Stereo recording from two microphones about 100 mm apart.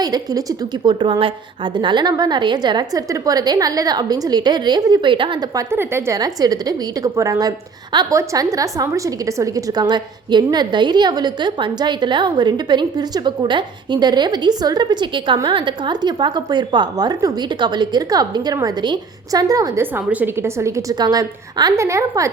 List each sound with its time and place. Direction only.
0.0 s a woman's voice: 40° right (ahead or behind)
5.7 s a woman's voice: 25° right (ahead or behind)
6.1 s a woman's voice: 40° right (ahead or behind)
19.8 s a woman's voice: 20° right (ahead or behind)
20.9 s a woman's voice: 40° right (ahead or behind)